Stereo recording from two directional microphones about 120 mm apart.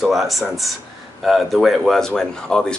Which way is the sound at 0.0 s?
Centre (ahead or behind).